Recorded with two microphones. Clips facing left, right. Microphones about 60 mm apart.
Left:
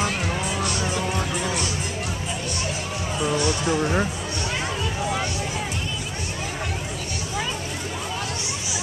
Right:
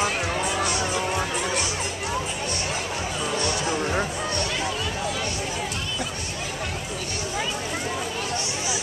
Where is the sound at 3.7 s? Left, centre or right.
Centre.